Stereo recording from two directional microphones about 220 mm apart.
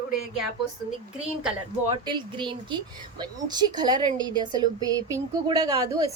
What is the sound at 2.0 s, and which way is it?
A woman's voice, 20° right (ahead or behind).